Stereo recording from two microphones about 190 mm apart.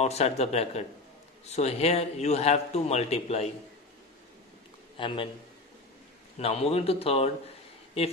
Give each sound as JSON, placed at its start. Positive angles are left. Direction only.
{"t": 0.0, "sound": "a man's voice", "side_deg": 35}
{"t": 4.9, "sound": "a man's voice", "side_deg": 25}
{"t": 6.3, "sound": "a man's voice", "side_deg": 30}